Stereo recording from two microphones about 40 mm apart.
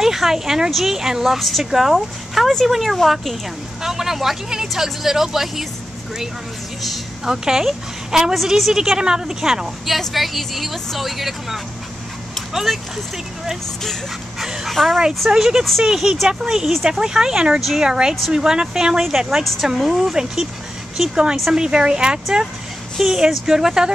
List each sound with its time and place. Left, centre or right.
0.0 s speech: centre
3.8 s speech: centre
7.2 s speech: centre
9.8 s speech: centre
12.7 s speech: centre
14.4 s speech: centre
14.7 s speech: centre
15.2 s speech: centre
21.2 s speech: centre
22.9 s speech: centre